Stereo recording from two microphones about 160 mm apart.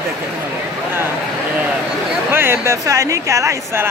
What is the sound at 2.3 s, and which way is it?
Speech, 15° right (ahead or behind).